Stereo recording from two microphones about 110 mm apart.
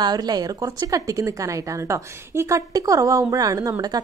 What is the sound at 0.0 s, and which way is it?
Speech, 40° right (ahead or behind).